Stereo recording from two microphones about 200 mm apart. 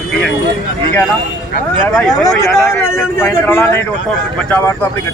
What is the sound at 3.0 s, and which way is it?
A man's voice, 10° left (ahead or behind).